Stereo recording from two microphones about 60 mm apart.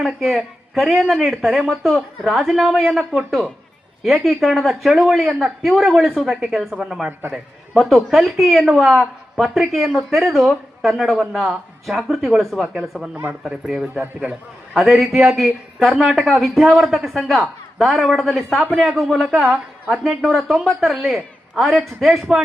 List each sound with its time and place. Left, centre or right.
0.0 s speech: centre
14.0 s a man's voice: right
14.8 s speech: centre